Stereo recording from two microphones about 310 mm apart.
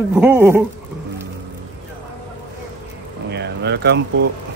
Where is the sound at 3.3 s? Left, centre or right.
Right.